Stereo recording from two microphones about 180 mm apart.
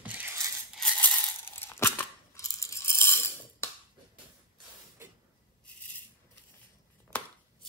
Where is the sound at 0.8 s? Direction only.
10° left (ahead or behind).